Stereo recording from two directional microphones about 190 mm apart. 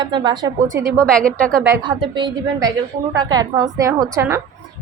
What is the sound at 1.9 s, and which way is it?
A woman's voice, 25° right (ahead or behind).